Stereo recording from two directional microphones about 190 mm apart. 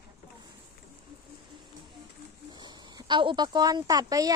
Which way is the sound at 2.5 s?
25° right (ahead or behind).